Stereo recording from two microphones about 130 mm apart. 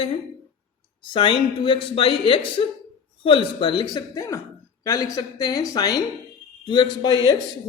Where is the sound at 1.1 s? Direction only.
40° left (ahead or behind).